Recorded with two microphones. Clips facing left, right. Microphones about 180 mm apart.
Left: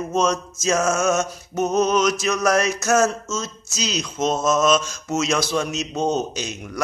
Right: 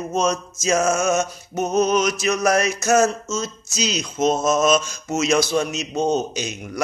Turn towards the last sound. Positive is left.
turn(degrees=0)  # may be behind; listen again after turning